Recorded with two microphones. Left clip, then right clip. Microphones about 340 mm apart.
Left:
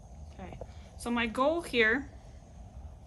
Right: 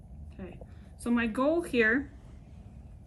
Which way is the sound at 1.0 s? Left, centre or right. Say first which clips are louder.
Even; centre.